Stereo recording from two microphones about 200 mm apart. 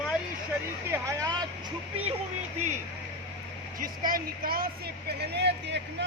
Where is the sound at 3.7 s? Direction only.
45° right (ahead or behind).